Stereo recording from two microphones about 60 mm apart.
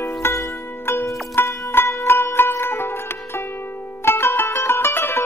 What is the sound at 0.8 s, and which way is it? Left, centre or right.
Music, left.